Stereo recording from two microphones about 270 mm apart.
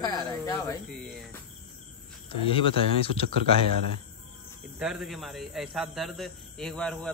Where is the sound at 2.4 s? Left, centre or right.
Centre.